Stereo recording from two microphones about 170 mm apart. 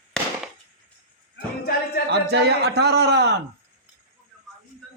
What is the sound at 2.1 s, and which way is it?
A man's voice, 80° right.